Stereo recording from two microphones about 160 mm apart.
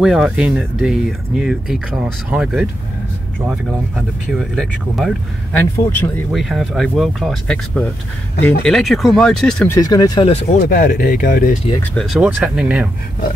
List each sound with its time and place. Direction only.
0.0 s speech: 5° right (ahead or behind)
5.6 s speech: 10° left (ahead or behind)
6.3 s speech: centre (ahead or behind)
9.7 s speech: 20° left (ahead or behind)
10.5 s speech: 60° left (ahead or behind)
11.9 s speech: centre (ahead or behind)